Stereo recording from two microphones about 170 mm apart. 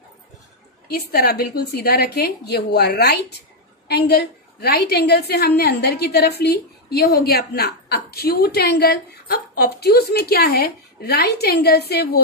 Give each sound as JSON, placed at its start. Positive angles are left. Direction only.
{"t": 0.9, "sound": "a woman's voice", "side_deg": 65}